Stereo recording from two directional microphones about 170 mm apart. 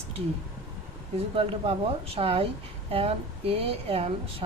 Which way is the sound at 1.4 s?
35° right (ahead or behind).